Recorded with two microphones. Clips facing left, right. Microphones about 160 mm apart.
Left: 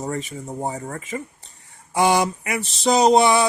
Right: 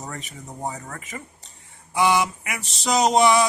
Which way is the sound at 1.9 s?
45° left (ahead or behind).